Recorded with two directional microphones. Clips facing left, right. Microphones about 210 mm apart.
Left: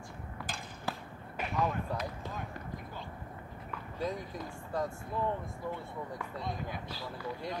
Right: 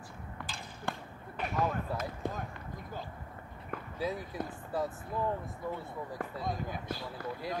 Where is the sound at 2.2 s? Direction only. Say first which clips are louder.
Right 5 dB; 50° right (ahead or behind).